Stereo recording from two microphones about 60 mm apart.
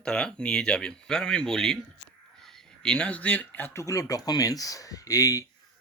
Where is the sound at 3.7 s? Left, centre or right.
Left.